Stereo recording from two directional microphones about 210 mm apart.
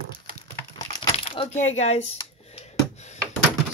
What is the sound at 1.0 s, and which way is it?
Speech, 25° left (ahead or behind).